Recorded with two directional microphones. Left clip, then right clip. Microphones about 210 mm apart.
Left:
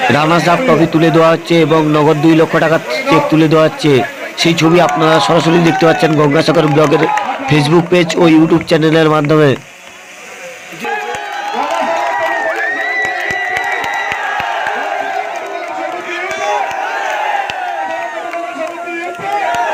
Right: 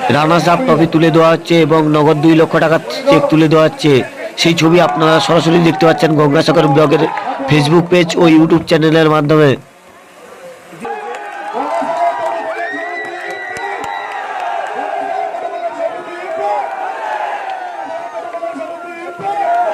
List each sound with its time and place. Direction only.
0.1 s a man's voice: centre (ahead or behind)